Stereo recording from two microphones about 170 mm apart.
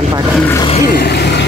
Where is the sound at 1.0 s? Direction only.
75° left (ahead or behind).